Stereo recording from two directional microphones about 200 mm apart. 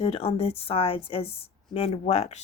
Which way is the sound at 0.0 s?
30° left (ahead or behind).